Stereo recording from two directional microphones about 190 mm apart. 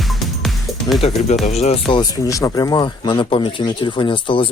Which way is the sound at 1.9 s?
15° left (ahead or behind).